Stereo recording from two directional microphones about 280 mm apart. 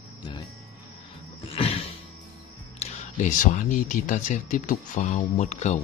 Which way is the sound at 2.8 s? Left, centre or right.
Left.